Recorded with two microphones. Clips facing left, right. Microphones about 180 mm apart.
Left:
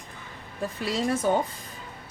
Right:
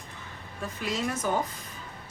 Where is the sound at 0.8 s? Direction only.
35° left (ahead or behind).